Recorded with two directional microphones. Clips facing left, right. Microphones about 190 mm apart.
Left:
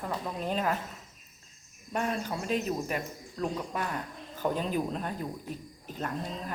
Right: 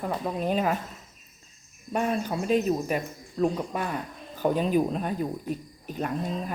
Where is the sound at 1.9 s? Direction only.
20° right (ahead or behind).